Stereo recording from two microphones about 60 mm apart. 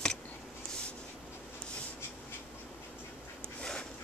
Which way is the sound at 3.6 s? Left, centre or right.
Centre.